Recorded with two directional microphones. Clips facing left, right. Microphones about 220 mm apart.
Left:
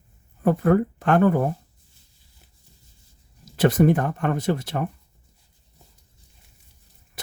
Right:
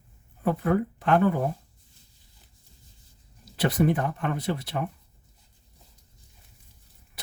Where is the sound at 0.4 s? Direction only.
50° left (ahead or behind).